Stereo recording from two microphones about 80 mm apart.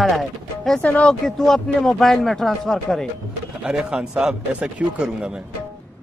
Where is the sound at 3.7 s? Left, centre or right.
Centre.